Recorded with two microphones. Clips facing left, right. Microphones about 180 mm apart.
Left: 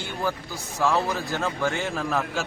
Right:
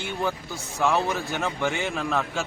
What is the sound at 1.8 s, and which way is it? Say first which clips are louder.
Speech: even; centre (ahead or behind).